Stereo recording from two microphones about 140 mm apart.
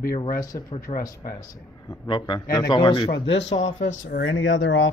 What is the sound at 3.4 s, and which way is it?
Speech, 55° left (ahead or behind).